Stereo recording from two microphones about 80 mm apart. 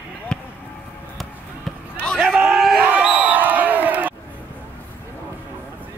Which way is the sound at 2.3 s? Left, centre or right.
Centre.